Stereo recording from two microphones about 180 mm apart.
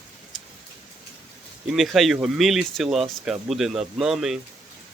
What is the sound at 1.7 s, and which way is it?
Speech, centre (ahead or behind).